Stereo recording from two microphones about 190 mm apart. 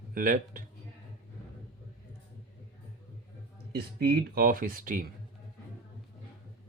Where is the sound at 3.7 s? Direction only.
50° right (ahead or behind).